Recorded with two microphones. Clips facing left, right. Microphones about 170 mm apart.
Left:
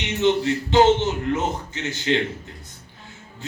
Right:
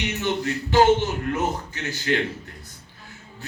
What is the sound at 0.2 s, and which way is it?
A man's voice, 25° left (ahead or behind).